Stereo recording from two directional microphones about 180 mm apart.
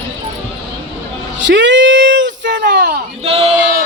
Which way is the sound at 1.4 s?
85° right.